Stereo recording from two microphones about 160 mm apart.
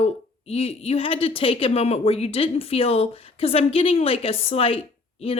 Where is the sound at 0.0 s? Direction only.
40° left (ahead or behind).